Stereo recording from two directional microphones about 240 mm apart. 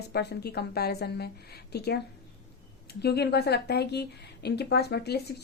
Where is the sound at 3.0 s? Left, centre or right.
Left.